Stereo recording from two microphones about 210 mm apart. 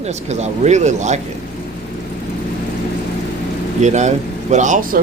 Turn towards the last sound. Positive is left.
turn(degrees=-35)  # may be behind; listen again after turning